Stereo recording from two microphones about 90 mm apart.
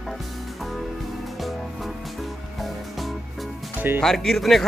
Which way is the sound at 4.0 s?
5° left (ahead or behind).